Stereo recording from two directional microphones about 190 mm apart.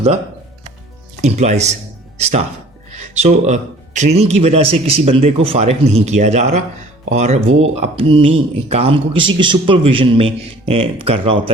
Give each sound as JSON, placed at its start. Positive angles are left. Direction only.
{"t": 1.2, "sound": "a man's voice", "side_deg": -35}